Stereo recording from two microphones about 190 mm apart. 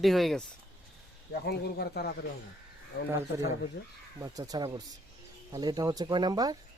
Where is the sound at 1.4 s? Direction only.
55° left (ahead or behind).